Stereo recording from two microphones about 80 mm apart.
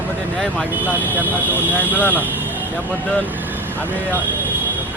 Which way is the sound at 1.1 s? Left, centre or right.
Right.